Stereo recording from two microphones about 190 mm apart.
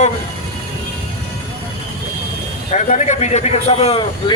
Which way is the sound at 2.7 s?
40° left (ahead or behind).